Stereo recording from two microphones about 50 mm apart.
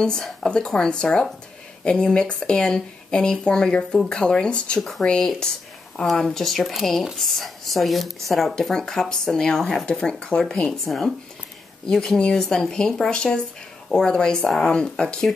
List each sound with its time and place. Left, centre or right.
0.5 s speech: centre
6.1 s speech: centre
10.9 s speech: centre